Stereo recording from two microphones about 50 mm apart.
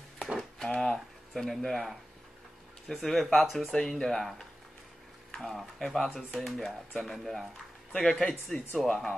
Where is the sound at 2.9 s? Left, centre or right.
Centre.